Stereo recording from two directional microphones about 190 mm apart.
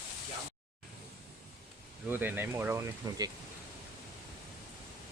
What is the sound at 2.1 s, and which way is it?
Speech, 10° right (ahead or behind).